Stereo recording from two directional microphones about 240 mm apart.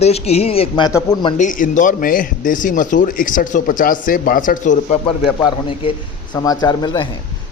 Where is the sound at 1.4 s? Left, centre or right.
Left.